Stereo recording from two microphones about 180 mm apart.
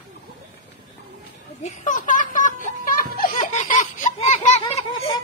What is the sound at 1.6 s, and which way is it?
Music, 45° left (ahead or behind).